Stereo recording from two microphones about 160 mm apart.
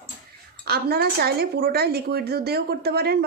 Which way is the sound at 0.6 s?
80° right.